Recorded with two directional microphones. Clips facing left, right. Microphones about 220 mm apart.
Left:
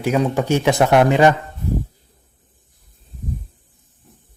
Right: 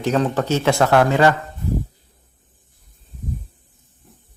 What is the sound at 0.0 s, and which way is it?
Speech, 10° left (ahead or behind).